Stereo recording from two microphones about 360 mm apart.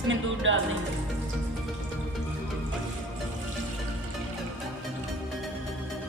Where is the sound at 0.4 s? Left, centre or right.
Right.